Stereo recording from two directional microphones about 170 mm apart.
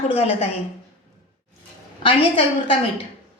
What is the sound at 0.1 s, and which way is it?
Speech, 35° left (ahead or behind).